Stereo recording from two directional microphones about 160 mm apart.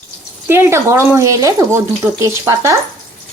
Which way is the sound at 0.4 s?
15° right (ahead or behind).